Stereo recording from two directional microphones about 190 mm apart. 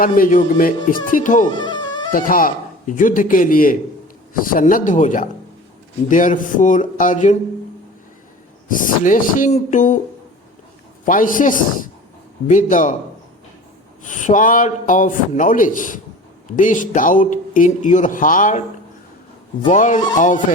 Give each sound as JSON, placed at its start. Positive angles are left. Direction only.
{"t": 0.0, "sound": "a man's voice", "side_deg": 45}
{"t": 1.5, "sound": "music", "side_deg": 25}
{"t": 2.1, "sound": "a man's voice", "side_deg": 45}
{"t": 8.6, "sound": "a man's voice", "side_deg": 45}
{"t": 11.0, "sound": "a man's voice", "side_deg": 45}
{"t": 14.0, "sound": "a man's voice", "side_deg": 40}
{"t": 19.7, "sound": "speech", "side_deg": 40}